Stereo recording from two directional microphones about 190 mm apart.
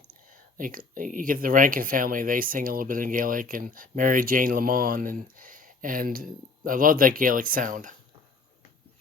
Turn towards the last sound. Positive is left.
turn(degrees=-45)  # may be behind; listen again after turning